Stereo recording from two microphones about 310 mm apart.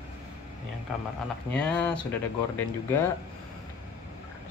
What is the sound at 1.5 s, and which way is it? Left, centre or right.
Speech, centre.